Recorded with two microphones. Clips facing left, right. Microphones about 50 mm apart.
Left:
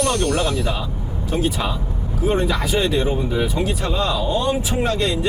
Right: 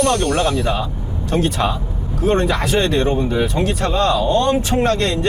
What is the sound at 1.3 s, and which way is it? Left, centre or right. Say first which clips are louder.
Speech: right 3 dB; right.